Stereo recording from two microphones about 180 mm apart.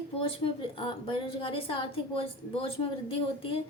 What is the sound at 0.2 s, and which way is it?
A woman's voice, 30° left (ahead or behind).